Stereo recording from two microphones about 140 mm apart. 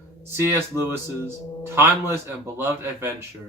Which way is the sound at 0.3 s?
15° right (ahead or behind).